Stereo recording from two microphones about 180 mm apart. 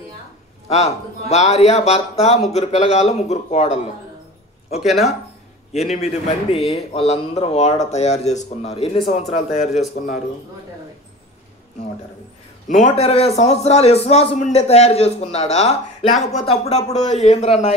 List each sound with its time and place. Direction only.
0.7 s a man's voice: 40° left (ahead or behind)
4.7 s speech: centre (ahead or behind)
5.7 s a man's voice: 40° left (ahead or behind)
12.6 s a man's voice: 45° left (ahead or behind)